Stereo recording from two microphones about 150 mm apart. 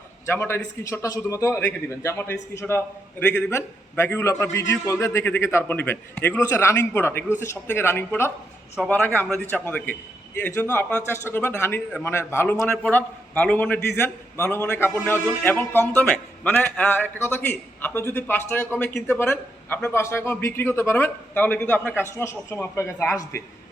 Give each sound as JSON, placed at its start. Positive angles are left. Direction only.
{"t": 0.3, "sound": "a man's voice", "side_deg": 15}
{"t": 11.9, "sound": "a man's voice", "side_deg": 5}